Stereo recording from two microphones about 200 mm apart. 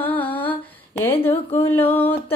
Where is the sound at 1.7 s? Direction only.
10° left (ahead or behind).